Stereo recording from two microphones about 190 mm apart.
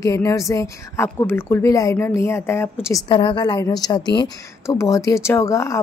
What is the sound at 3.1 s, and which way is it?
A woman's voice, 25° left (ahead or behind).